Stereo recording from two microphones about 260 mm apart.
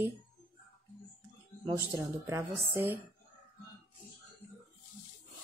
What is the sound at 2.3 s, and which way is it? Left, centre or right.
Speech, centre.